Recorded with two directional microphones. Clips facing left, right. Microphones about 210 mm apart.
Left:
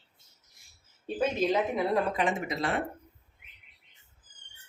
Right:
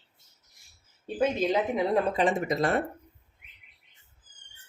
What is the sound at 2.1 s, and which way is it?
Speech, 40° right (ahead or behind).